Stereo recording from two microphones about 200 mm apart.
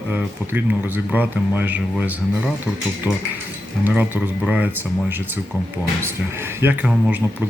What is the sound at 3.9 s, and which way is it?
Speech, 10° right (ahead or behind).